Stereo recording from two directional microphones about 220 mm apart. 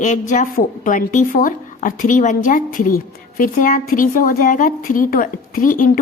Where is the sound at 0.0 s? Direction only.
35° left (ahead or behind).